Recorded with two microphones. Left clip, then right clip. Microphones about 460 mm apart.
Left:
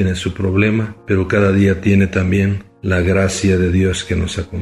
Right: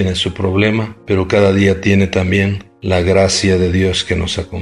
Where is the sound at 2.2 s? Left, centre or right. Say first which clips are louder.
Right 3 dB; centre.